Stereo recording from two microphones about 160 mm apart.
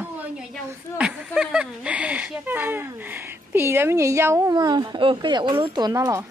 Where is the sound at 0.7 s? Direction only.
10° right (ahead or behind).